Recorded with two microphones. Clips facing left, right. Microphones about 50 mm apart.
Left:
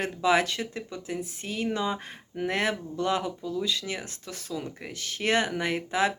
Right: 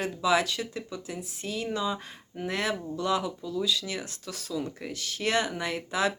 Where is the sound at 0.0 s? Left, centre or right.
Left.